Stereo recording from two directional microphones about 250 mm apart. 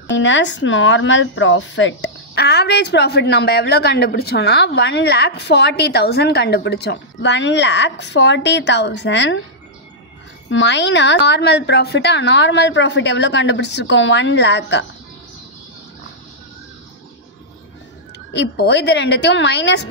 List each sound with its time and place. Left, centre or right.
0.1 s speech: left
10.5 s speech: left
18.3 s speech: left